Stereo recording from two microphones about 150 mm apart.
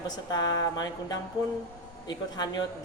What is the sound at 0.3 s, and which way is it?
A man's voice, 25° left (ahead or behind).